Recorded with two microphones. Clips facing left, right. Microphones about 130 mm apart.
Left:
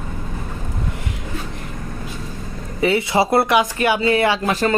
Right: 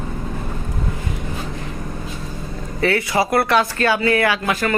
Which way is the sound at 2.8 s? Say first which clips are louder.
Left 1 dB; 20° left (ahead or behind).